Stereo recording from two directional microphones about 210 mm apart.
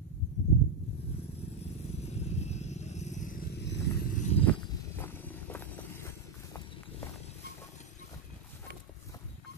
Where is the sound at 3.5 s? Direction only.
55° left (ahead or behind).